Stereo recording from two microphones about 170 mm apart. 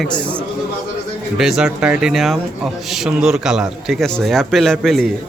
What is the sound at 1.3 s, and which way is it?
Speech, 5° right (ahead or behind).